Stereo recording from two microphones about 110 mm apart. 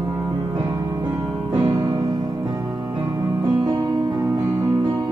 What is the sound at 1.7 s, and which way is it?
Music, 40° right (ahead or behind).